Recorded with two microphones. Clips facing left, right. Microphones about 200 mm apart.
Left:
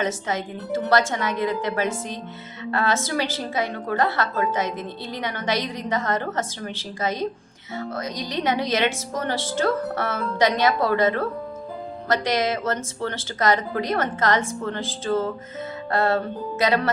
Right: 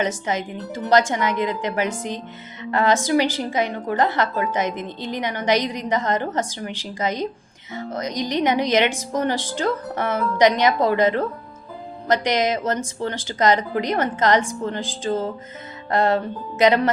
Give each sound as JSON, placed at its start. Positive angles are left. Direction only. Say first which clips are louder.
{"t": 0.0, "sound": "a woman's voice", "louder": "right 2 dB", "side_deg": -20}